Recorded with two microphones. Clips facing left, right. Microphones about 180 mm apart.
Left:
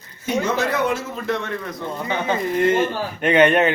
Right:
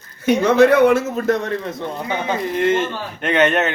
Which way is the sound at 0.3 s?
60° right (ahead or behind).